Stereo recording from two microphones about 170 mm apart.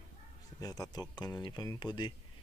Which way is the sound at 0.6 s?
20° left (ahead or behind).